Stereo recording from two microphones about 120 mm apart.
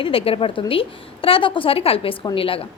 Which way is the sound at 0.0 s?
50° left (ahead or behind).